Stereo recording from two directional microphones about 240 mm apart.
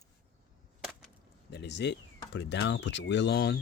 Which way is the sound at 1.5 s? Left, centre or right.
Left.